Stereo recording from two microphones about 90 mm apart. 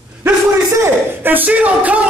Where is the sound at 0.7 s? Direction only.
25° right (ahead or behind).